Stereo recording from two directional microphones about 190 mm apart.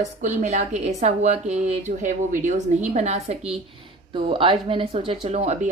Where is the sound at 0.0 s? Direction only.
40° right (ahead or behind).